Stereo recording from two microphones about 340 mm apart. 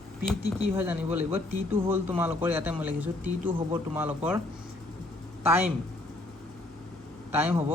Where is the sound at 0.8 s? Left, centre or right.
Centre.